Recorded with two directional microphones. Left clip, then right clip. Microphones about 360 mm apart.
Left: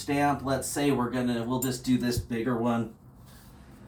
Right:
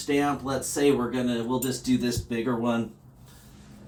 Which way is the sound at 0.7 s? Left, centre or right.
Centre.